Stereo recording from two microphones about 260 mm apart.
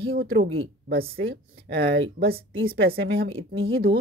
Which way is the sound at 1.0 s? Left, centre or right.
Right.